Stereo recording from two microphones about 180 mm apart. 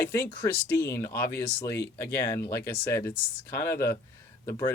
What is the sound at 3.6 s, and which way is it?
Speech, 15° left (ahead or behind).